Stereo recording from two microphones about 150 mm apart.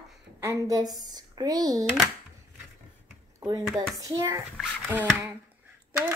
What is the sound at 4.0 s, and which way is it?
Speech, 20° right (ahead or behind).